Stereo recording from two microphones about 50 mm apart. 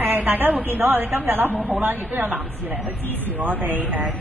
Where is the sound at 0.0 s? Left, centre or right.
Right.